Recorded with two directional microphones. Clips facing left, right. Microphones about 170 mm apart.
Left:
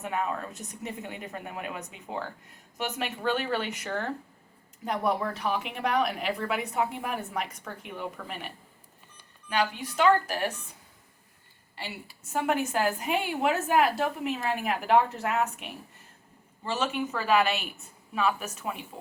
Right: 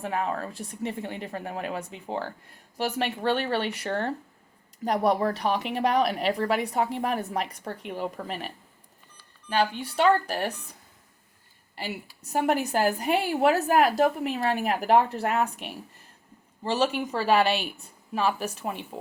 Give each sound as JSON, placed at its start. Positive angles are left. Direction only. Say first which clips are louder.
{"t": 0.0, "sound": "a woman's voice", "louder": "right 2 dB", "side_deg": -30}
{"t": 9.5, "sound": "a woman's voice", "louder": "right 3 dB", "side_deg": -30}
{"t": 11.8, "sound": "a woman's voice", "louder": "right 5 dB", "side_deg": -35}